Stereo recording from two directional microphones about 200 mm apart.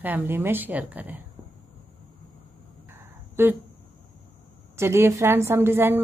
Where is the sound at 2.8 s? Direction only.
10° right (ahead or behind).